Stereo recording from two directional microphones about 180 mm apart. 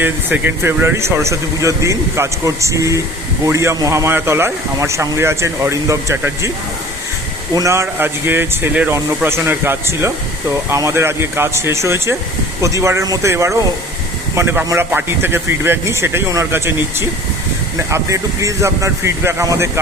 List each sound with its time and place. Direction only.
0.0 s speech: 10° right (ahead or behind)
7.5 s speech: 15° right (ahead or behind)